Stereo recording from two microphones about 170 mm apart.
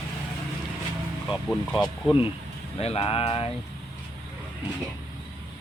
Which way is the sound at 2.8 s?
35° left (ahead or behind).